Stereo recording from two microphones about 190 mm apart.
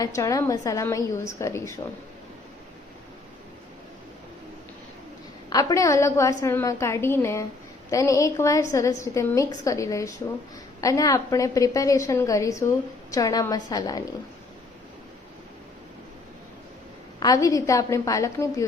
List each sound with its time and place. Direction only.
0.0 s a woman's voice: 15° left (ahead or behind)
5.5 s a woman's voice: 20° left (ahead or behind)
17.2 s a woman's voice: 20° left (ahead or behind)